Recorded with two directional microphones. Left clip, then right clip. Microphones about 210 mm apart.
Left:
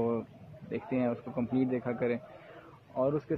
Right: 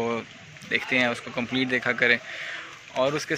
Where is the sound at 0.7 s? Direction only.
5° right (ahead or behind).